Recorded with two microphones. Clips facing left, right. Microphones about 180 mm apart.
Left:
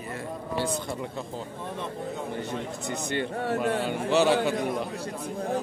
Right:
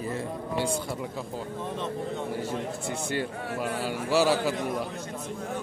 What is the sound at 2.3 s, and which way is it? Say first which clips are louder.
A man's voice: right 1 dB; 5° right (ahead or behind).